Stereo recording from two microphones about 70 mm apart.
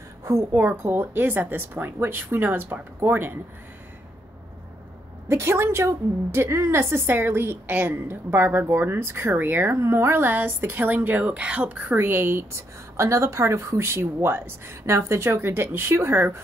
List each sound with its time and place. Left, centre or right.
0.2 s a woman's voice: right
5.3 s a woman's voice: right; by 11.8 s centre
11.9 s a woman's voice: right